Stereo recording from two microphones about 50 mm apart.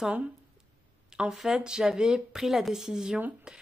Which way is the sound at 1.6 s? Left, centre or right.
Centre.